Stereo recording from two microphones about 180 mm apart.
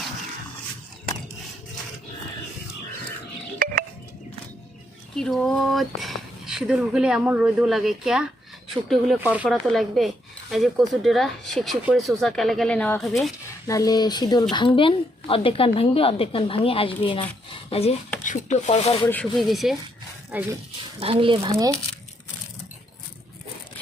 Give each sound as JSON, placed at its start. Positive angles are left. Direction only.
{"t": 3.6, "sound": "a sound", "side_deg": -50}
{"t": 5.1, "sound": "speech", "side_deg": 5}
{"t": 13.7, "sound": "a woman's voice", "side_deg": 20}
{"t": 19.0, "sound": "speech", "side_deg": 5}
{"t": 21.0, "sound": "speech", "side_deg": -30}